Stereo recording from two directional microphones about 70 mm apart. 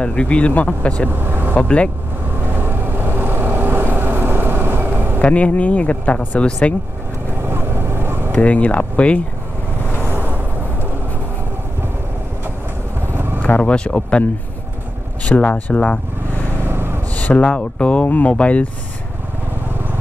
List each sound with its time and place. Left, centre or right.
0.0 s speech: centre
1.1 s speech: right
1.5 s speech: centre
2.5 s vehicle: right
5.2 s speech: left
7.4 s vehicle: right
8.3 s speech: centre
10.0 s vehicle: right
13.0 s vehicle: right
13.4 s speech: centre
15.2 s speech: centre
16.6 s gasp: right
17.1 s speech: left